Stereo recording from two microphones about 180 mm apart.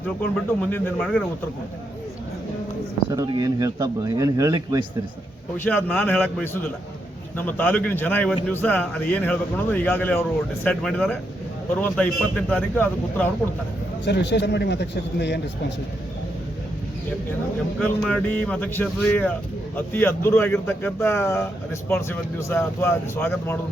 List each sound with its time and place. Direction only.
0.7 s a man's voice: 10° left (ahead or behind)
3.1 s speech: 20° right (ahead or behind)
5.6 s a man's voice: 10° left (ahead or behind)
14.0 s a man's voice: 75° left (ahead or behind)
17.7 s a man's voice: 5° left (ahead or behind)